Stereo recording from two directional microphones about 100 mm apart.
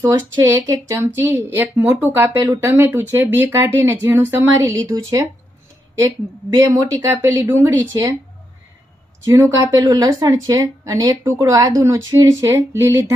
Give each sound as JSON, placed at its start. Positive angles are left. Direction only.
{"t": 0.0, "sound": "speech", "side_deg": -25}
{"t": 6.7, "sound": "a woman's voice", "side_deg": -35}
{"t": 9.2, "sound": "a woman's voice", "side_deg": -30}